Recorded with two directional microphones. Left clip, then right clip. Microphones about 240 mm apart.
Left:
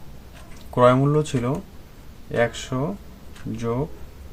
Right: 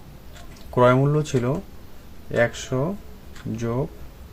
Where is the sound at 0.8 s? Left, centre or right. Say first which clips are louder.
Left 1 dB; centre.